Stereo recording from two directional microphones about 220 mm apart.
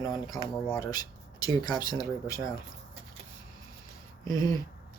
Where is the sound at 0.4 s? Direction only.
10° left (ahead or behind).